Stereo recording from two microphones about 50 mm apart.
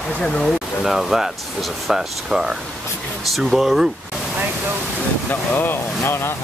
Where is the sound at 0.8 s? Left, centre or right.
Centre.